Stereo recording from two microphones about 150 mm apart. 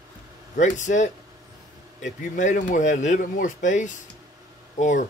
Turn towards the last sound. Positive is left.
turn(degrees=55)  # may be behind; listen again after turning